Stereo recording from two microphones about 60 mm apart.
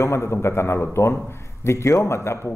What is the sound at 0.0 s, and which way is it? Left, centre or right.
Speech, left.